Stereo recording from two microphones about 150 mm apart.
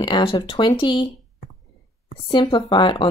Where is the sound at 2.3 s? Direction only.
30° left (ahead or behind).